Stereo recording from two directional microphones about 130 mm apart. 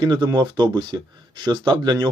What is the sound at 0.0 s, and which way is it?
Speech, 35° right (ahead or behind).